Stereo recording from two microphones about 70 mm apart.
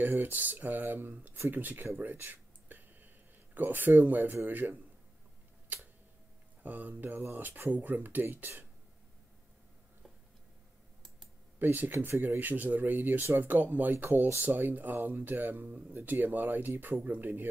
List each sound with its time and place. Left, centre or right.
0.0 s speech: right
2.0 s a sound: right
3.5 s speech: right
6.6 s speech: right
11.6 s speech: right